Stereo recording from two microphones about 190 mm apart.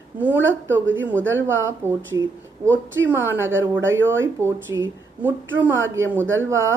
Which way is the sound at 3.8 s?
90° right.